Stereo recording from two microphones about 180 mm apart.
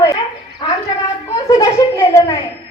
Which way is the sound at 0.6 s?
30° left (ahead or behind).